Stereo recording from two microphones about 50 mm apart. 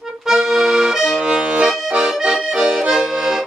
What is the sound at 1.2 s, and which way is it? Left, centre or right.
Accordion, centre.